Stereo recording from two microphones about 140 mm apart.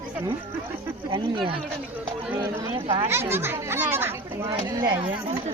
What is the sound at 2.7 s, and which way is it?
Speech, 50° right (ahead or behind).